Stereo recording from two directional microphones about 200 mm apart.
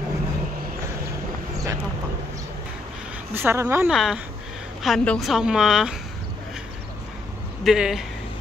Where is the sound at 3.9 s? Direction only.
Centre (ahead or behind).